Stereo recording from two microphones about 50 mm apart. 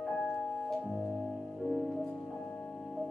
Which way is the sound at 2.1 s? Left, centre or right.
Centre.